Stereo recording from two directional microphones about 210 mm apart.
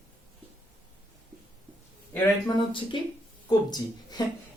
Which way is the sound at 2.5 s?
25° left (ahead or behind).